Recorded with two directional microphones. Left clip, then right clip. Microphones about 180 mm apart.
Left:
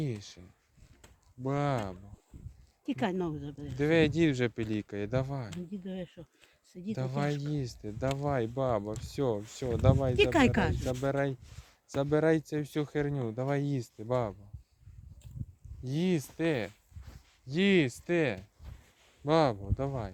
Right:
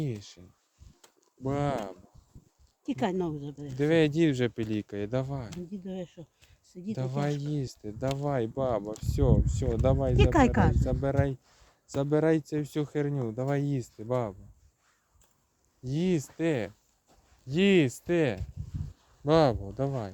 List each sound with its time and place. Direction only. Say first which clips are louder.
0.0 s speech: right 1 dB; 10° right (ahead or behind)
1.5 s speech: right 1 dB; 20° right (ahead or behind)
5.7 s speech: right 3 dB; centre (ahead or behind)
10.3 s speech: right 3 dB; 45° left (ahead or behind)
10.8 s speech: right 1 dB; 10° right (ahead or behind)
15.8 s speech: right 2 dB; 10° right (ahead or behind)
17.4 s speech: right 3 dB; 30° right (ahead or behind)